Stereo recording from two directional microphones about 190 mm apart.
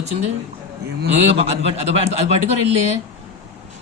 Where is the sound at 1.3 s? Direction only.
30° right (ahead or behind).